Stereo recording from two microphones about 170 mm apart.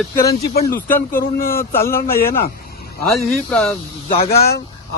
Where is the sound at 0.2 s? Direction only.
65° left (ahead or behind).